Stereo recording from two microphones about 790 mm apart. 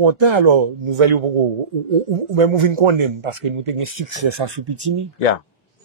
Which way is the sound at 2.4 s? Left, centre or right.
Right.